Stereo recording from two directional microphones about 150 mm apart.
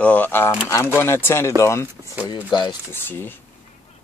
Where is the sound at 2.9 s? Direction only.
15° left (ahead or behind).